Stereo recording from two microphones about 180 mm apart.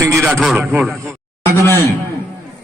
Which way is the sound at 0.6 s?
15° right (ahead or behind).